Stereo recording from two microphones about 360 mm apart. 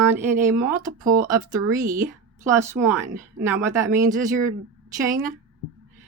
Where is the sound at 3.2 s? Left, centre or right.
Centre.